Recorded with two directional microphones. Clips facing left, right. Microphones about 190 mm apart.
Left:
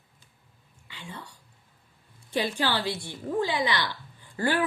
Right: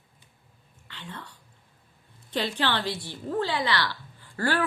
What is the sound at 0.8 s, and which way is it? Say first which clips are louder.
A woman's voice: even; 10° left (ahead or behind).